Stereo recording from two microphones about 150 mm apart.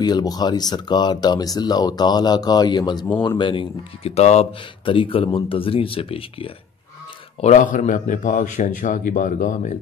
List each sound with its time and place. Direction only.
0.0 s speech: 25° left (ahead or behind)
7.3 s a man's voice: 55° left (ahead or behind)